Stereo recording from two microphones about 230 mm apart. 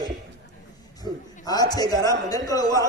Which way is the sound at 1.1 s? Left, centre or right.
Centre.